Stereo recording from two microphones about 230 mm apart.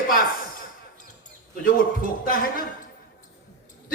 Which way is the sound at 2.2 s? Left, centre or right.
Left.